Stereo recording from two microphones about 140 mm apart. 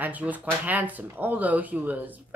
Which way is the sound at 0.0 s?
10° right (ahead or behind).